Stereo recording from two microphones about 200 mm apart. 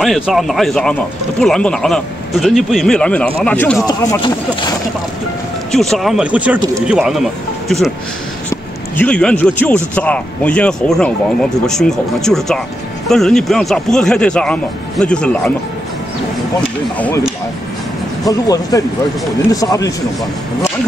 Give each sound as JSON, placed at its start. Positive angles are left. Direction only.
{"t": 0.0, "sound": "speech", "side_deg": 0}
{"t": 3.8, "sound": "speech", "side_deg": 20}
{"t": 5.7, "sound": "speech", "side_deg": 0}
{"t": 8.9, "sound": "speech", "side_deg": 5}
{"t": 18.3, "sound": "speech", "side_deg": 15}